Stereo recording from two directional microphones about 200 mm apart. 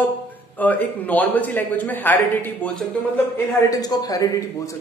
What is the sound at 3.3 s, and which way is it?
A man's voice, 20° left (ahead or behind).